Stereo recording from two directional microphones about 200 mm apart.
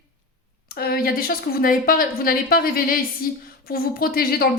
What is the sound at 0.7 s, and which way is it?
A woman's voice, 50° left (ahead or behind).